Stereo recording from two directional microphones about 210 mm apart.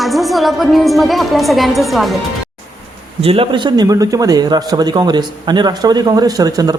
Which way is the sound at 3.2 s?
25° right (ahead or behind).